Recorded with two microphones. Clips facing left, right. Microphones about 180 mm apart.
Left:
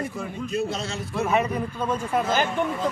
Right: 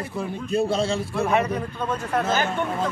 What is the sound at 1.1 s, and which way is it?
A man's voice, 5° left (ahead or behind).